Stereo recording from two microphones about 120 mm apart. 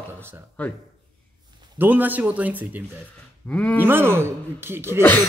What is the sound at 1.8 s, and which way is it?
Speech, 15° right (ahead or behind).